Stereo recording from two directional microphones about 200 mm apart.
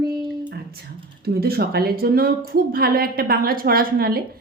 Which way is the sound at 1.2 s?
50° right (ahead or behind).